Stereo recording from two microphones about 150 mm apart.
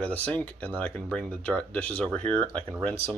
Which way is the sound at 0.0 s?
10° left (ahead or behind).